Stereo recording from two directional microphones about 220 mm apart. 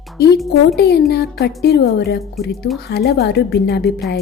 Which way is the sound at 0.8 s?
50° left (ahead or behind).